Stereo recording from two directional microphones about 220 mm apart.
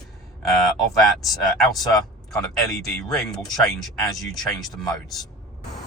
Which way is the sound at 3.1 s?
Centre (ahead or behind).